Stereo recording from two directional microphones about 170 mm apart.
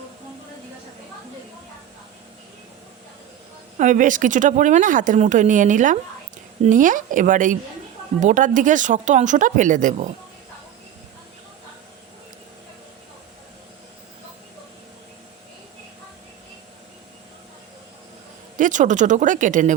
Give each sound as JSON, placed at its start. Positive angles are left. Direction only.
{"t": 3.8, "sound": "speech", "side_deg": -50}
{"t": 18.5, "sound": "speech", "side_deg": -50}